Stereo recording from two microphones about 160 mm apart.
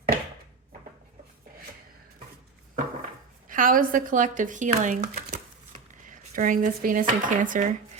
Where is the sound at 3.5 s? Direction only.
60° right (ahead or behind).